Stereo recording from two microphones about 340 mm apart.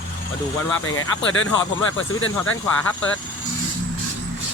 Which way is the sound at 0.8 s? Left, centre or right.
Left.